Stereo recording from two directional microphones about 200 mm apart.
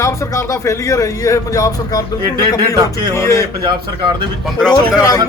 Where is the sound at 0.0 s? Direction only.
15° left (ahead or behind).